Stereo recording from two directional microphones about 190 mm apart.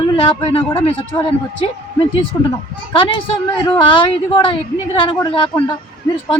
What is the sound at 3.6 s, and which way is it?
Speech, 25° left (ahead or behind).